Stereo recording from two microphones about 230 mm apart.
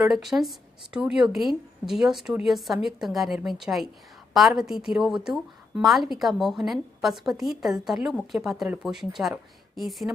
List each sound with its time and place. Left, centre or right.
0.0 s speech: centre